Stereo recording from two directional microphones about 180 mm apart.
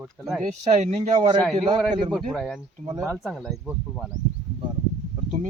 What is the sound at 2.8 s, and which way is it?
Speech, 20° right (ahead or behind).